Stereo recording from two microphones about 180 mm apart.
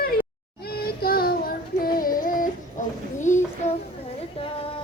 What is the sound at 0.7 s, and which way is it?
Child singing, 55° left (ahead or behind).